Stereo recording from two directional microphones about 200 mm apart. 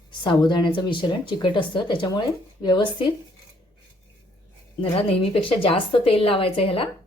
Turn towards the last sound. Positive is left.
turn(degrees=30)  # may be behind; listen again after turning